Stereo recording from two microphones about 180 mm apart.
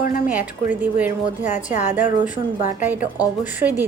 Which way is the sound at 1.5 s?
40° left (ahead or behind).